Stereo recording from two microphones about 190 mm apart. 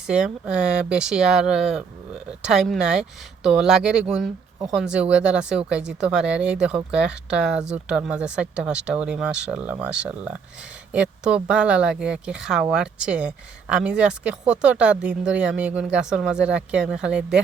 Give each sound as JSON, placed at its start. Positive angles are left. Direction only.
{"t": 0.1, "sound": "speech", "side_deg": -5}